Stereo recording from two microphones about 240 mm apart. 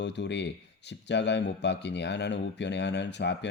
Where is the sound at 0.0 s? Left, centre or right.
Left.